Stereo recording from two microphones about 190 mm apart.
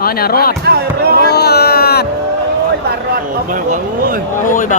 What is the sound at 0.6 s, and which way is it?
Speech, 55° right (ahead or behind).